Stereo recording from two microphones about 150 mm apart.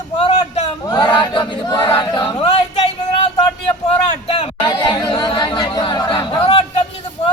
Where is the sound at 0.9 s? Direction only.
30° left (ahead or behind).